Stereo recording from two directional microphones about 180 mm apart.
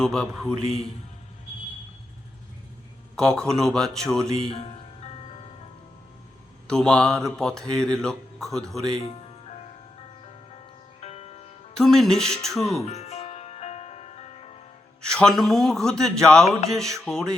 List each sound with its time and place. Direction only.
0.0 s speech: 5° left (ahead or behind)
3.2 s speech: 5° left (ahead or behind)
4.4 s music: 35° left (ahead or behind)
6.7 s speech: 5° left (ahead or behind)
9.0 s music: 35° left (ahead or behind)
11.0 s music: 35° left (ahead or behind)
11.7 s speech: centre (ahead or behind)
12.7 s music: 35° left (ahead or behind)
15.0 s speech: 5° left (ahead or behind)